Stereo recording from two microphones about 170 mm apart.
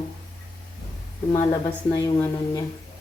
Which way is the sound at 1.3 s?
20° left (ahead or behind).